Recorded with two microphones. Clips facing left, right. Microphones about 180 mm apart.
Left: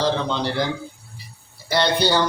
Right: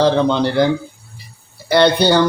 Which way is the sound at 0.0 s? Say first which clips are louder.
Right 8 dB; 60° right (ahead or behind).